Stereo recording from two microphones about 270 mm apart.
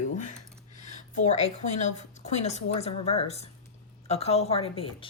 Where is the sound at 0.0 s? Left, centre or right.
Left.